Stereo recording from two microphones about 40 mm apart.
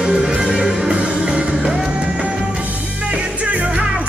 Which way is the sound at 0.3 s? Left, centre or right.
Right.